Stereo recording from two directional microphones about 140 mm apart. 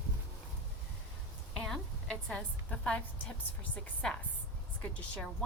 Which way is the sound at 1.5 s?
5° left (ahead or behind).